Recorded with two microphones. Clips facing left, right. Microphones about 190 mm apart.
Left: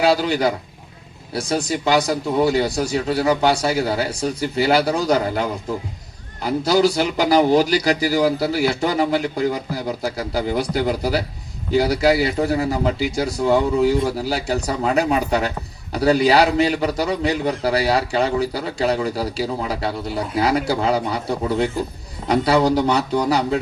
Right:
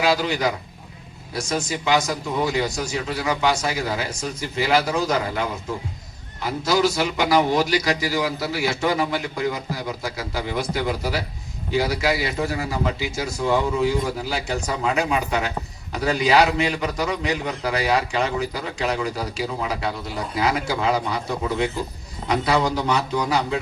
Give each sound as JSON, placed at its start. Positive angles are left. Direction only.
{"t": 0.0, "sound": "a man's voice", "side_deg": 35}